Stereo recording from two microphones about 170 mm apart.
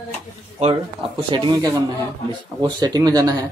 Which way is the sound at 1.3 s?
25° right (ahead or behind).